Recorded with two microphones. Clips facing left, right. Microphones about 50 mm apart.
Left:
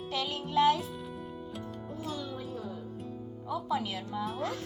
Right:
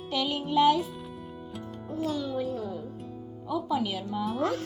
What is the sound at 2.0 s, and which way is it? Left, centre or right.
Music, right.